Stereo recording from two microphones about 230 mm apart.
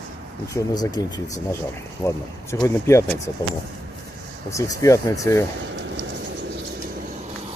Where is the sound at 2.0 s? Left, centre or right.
Centre.